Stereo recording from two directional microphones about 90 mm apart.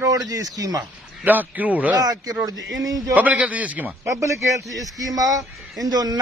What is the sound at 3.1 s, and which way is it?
Speech, 15° right (ahead or behind).